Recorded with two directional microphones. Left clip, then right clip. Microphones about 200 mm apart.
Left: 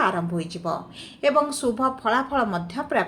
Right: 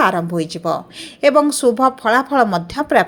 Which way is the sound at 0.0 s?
45° right (ahead or behind).